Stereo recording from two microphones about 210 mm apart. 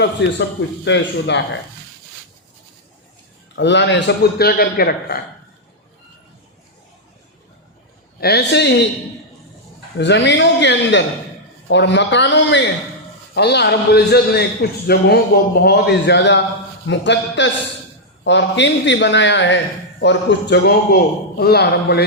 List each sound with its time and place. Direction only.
0.0 s a man's voice: 55° left (ahead or behind)
3.5 s a man's voice: 55° left (ahead or behind)
8.2 s a man's voice: 50° left (ahead or behind)
10.0 s a man's voice: 55° left (ahead or behind)